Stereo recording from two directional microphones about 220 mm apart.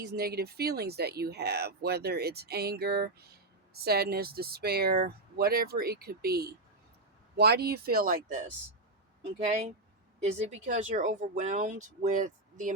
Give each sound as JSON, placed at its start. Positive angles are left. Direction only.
{"t": 0.0, "sound": "speech", "side_deg": -45}
{"t": 10.3, "sound": "speech", "side_deg": -30}